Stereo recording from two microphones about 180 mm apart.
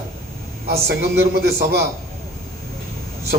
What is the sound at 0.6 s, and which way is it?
A man's voice, 60° right (ahead or behind).